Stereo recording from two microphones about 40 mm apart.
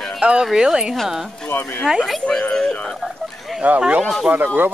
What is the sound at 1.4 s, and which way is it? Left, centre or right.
Speech, left.